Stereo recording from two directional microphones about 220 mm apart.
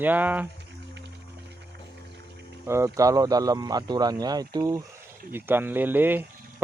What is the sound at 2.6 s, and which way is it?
Speech, 10° right (ahead or behind).